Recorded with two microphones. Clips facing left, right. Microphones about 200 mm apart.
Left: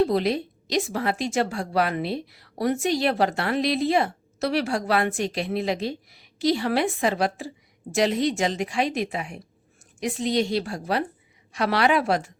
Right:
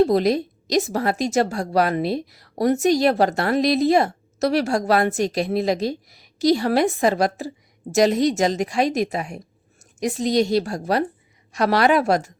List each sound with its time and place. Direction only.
0.0 s a woman's voice: 40° right (ahead or behind)